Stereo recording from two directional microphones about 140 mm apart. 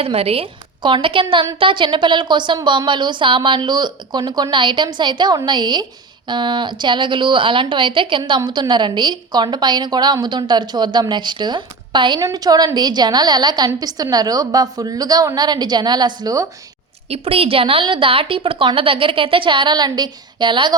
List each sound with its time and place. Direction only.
0.0 s a woman's voice: 45° right (ahead or behind); by 16.5 s 25° right (ahead or behind)
17.1 s a woman's voice: 45° right (ahead or behind)